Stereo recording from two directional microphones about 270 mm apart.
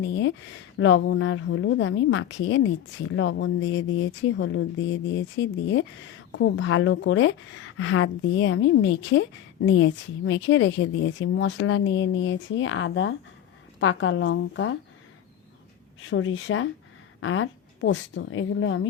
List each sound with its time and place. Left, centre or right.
0.0 s a woman's voice: left
16.0 s a woman's voice: left